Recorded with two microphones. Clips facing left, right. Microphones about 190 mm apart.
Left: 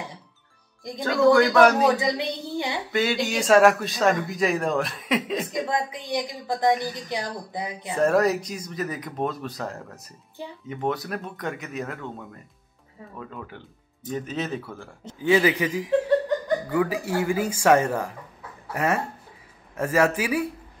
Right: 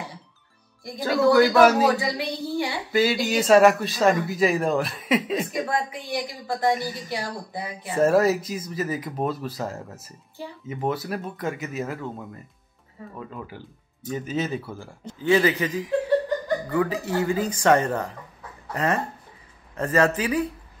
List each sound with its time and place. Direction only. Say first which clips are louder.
0.9 s speech: even; 5° right (ahead or behind)
2.0 s speech: left 1 dB; 20° left (ahead or behind)
2.9 s speech: right 3 dB; 5° right (ahead or behind)
5.7 s speech: even; 20° left (ahead or behind)
8.0 s speech: right 2 dB; 5° right (ahead or behind)
10.4 s speech: even; 20° left (ahead or behind)
10.7 s speech: right 1 dB; centre (ahead or behind)
15.0 s speech: even; 10° left (ahead or behind)